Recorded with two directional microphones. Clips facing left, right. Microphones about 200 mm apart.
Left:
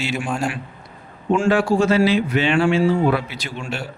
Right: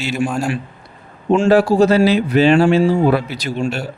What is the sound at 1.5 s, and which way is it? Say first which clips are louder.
A man's voice: right 5 dB; 40° right (ahead or behind).